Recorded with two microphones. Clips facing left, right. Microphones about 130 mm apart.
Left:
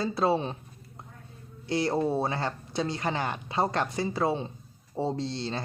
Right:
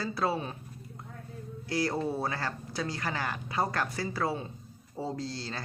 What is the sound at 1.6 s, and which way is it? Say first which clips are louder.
Speech: left 4 dB; 25° left (ahead or behind).